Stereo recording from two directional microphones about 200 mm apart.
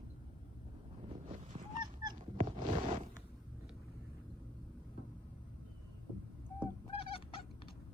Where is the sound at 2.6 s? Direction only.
35° right (ahead or behind).